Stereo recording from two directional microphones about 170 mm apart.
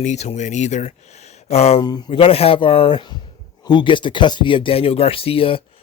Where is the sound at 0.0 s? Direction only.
45° left (ahead or behind).